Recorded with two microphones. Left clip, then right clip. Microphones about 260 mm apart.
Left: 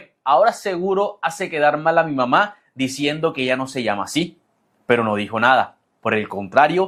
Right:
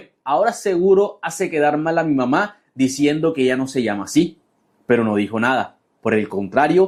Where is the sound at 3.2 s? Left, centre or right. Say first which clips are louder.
Right 2 dB; left.